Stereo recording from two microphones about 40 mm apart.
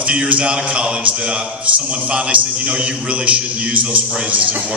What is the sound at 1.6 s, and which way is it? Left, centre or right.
A man's voice, right.